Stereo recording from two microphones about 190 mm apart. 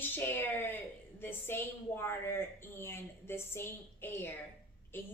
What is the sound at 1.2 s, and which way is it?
A woman's voice, 10° left (ahead or behind).